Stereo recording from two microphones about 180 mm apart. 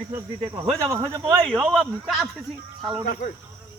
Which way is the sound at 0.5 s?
15° right (ahead or behind).